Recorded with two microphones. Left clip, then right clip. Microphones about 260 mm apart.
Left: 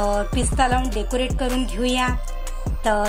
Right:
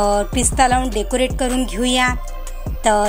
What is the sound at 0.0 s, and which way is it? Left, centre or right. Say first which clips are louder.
Speech: right 5 dB; right.